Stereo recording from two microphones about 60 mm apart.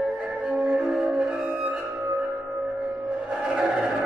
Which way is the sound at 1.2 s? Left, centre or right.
Centre.